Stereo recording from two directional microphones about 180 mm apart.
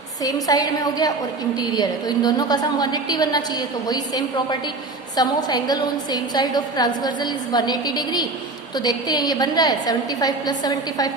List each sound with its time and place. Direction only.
0.4 s a woman's voice: 20° left (ahead or behind)